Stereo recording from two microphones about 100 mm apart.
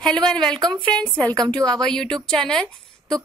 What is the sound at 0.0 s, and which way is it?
A woman's voice, 5° left (ahead or behind).